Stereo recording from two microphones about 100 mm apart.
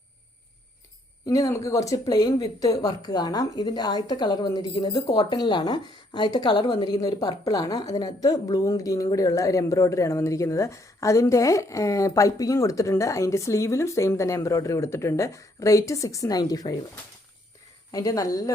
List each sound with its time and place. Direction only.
1.3 s speech: 30° left (ahead or behind)
17.9 s speech: 35° left (ahead or behind)